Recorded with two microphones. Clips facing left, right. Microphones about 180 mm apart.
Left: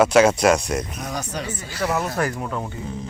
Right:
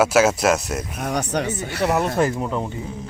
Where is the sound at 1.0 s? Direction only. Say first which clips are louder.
Right 6 dB; 70° right (ahead or behind).